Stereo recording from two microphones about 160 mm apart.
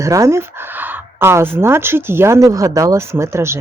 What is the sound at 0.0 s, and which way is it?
Speech, 20° right (ahead or behind).